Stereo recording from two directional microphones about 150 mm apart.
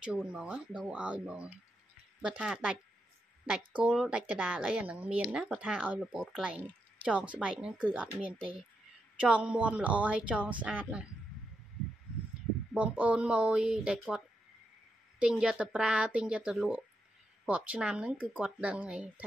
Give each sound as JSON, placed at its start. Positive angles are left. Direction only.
{"t": 0.0, "sound": "a woman's voice", "side_deg": -5}
{"t": 9.2, "sound": "a woman's voice", "side_deg": -5}
{"t": 12.7, "sound": "a woman's voice", "side_deg": -10}